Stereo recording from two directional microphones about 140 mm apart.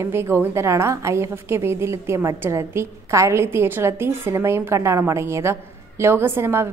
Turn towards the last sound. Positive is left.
turn(degrees=-15)  # may be behind; listen again after turning